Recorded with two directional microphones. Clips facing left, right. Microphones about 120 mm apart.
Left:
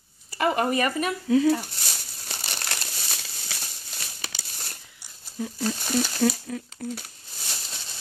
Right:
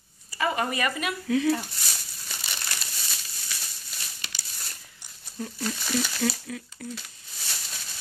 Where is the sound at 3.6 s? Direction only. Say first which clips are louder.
Left 2 dB; 60° left (ahead or behind).